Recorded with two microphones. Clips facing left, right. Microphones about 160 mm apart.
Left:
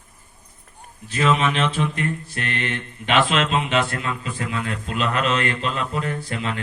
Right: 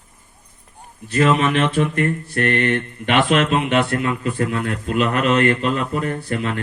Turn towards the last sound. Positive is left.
turn(degrees=-50)  # may be behind; listen again after turning